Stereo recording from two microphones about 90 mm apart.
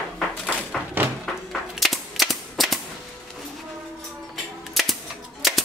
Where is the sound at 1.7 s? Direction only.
Centre (ahead or behind).